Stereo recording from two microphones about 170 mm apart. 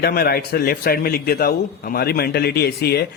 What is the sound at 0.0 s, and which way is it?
A man's voice, 65° left (ahead or behind).